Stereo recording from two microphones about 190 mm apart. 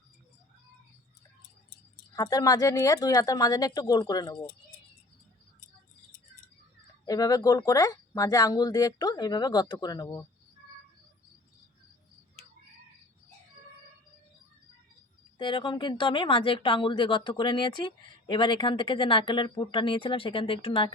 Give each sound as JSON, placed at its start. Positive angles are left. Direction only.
{"t": 2.1, "sound": "speech", "side_deg": 20}
{"t": 7.0, "sound": "speech", "side_deg": 20}
{"t": 15.4, "sound": "speech", "side_deg": 25}